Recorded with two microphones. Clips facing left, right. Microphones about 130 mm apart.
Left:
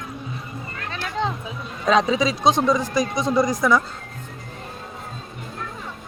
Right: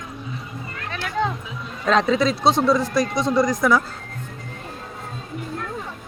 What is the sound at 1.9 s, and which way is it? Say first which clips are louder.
Speech: even; 10° left (ahead or behind).